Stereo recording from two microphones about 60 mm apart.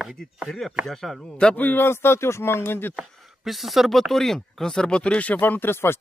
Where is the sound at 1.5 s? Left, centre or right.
Left.